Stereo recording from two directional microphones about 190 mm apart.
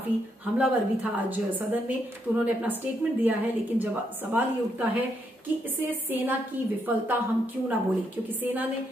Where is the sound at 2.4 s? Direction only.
10° right (ahead or behind).